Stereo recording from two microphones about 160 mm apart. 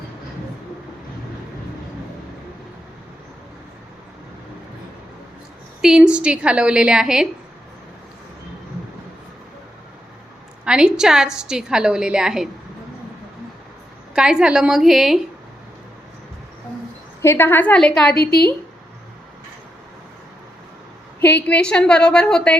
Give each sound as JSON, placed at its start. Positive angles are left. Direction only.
{"t": 5.8, "sound": "a woman's voice", "side_deg": -5}
{"t": 10.7, "sound": "a woman's voice", "side_deg": -5}
{"t": 14.2, "sound": "a woman's voice", "side_deg": -5}
{"t": 17.2, "sound": "a woman's voice", "side_deg": 15}
{"t": 18.1, "sound": "a woman's voice", "side_deg": 80}
{"t": 21.2, "sound": "a woman's voice", "side_deg": 10}